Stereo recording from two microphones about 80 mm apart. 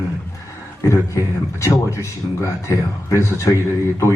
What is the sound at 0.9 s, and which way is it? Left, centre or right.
Speech, left.